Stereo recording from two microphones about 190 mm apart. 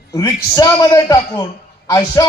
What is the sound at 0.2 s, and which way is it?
A man's voice, 20° left (ahead or behind).